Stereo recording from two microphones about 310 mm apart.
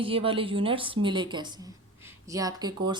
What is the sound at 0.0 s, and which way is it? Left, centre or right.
A woman's voice, centre.